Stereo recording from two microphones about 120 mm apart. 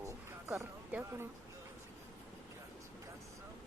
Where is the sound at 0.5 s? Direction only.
20° right (ahead or behind).